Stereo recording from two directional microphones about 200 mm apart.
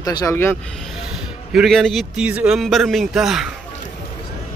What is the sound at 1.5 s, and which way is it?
A man's voice, centre (ahead or behind).